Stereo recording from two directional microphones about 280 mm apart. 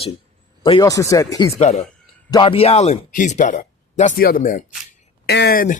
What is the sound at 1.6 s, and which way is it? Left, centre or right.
Speech, left.